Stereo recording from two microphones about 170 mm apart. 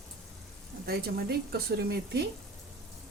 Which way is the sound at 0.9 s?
65° right (ahead or behind).